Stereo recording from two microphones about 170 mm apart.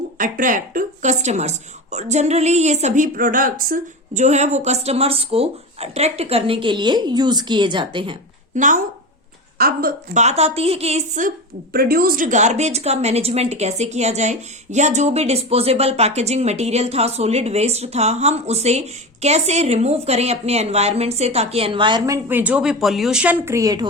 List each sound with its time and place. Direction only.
0.2 s a woman's voice: 50° right (ahead or behind); by 8.2 s 30° right (ahead or behind)
8.5 s a woman's voice: 50° right (ahead or behind)
10.2 s a woman's voice: 40° right (ahead or behind)
11.7 s a woman's voice: 60° right (ahead or behind); by 23.8 s 20° right (ahead or behind)